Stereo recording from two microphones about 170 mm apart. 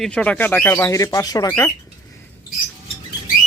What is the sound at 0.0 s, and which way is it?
Speech, 5° left (ahead or behind).